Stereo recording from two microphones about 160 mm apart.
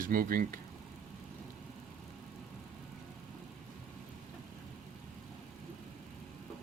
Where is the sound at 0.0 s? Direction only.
60° right (ahead or behind).